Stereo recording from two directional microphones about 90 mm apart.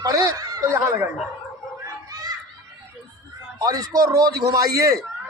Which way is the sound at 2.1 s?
45° right (ahead or behind).